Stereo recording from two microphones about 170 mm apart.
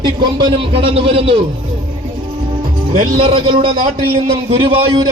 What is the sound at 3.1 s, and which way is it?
A man's voice, 30° right (ahead or behind).